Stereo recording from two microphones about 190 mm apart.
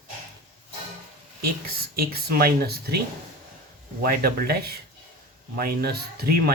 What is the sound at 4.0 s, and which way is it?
Speech, 50° right (ahead or behind).